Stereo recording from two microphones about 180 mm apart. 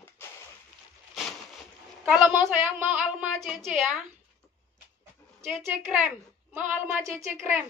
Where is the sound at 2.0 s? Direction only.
5° right (ahead or behind).